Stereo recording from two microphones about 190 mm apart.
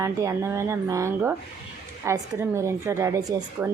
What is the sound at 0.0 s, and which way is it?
A woman's voice, 15° right (ahead or behind).